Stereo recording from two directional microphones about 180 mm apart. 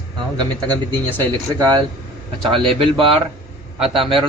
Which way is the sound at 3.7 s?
35° right (ahead or behind).